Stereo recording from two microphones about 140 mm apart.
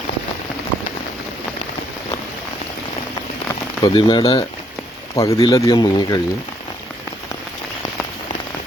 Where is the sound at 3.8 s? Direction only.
35° left (ahead or behind).